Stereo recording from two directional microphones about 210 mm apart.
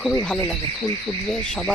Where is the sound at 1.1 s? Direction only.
15° left (ahead or behind).